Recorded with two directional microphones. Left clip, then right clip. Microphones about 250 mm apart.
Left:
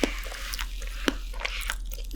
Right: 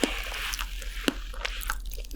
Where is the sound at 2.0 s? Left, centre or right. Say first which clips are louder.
Even; centre.